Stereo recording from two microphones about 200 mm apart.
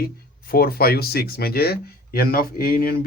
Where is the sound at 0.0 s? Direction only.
50° left (ahead or behind).